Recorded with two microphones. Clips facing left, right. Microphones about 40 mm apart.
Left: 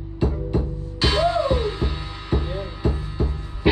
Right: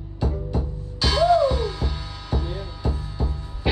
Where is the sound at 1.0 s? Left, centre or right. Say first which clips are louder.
Right 2 dB; left.